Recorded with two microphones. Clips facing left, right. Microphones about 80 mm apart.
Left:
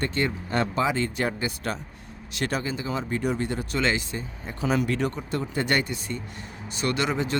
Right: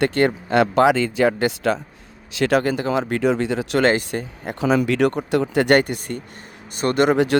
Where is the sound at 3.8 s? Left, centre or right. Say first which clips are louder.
Right 8 dB; right.